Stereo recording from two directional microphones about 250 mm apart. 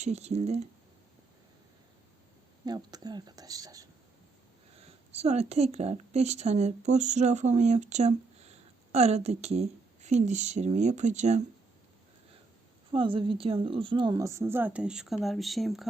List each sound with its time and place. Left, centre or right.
0.0 s speech: right
2.6 s a woman's voice: centre
4.9 s a woman's voice: right
12.9 s a woman's voice: centre